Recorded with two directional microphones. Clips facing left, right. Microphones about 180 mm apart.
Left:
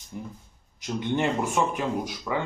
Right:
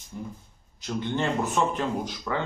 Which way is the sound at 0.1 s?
15° left (ahead or behind).